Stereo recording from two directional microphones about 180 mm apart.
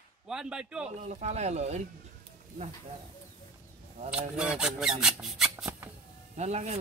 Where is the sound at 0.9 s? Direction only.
40° right (ahead or behind).